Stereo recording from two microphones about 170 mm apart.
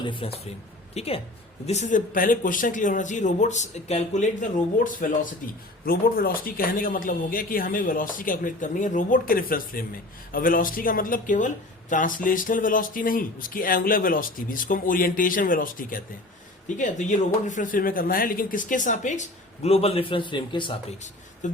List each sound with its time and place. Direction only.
0.0 s a man's voice: 30° left (ahead or behind)
21.4 s speech: 45° left (ahead or behind)